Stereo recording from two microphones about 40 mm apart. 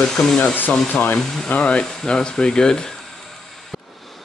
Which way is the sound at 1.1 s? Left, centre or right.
Left.